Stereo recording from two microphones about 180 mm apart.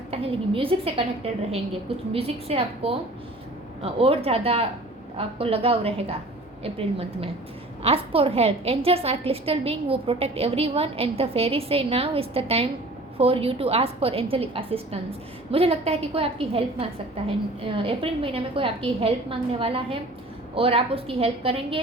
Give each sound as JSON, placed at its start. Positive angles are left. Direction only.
{"t": 0.1, "sound": "a woman's voice", "side_deg": -30}